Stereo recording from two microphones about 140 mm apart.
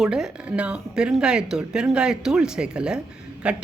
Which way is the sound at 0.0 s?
5° right (ahead or behind).